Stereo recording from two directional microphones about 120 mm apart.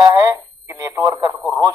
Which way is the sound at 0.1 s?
25° right (ahead or behind).